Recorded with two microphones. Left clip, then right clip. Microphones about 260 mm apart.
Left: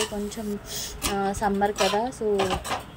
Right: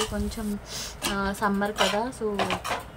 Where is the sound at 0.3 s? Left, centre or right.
Centre.